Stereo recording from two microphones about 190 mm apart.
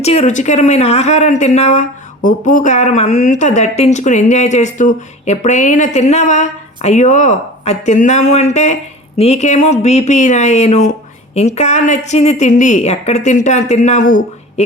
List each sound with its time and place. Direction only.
0.0 s speech: 35° left (ahead or behind)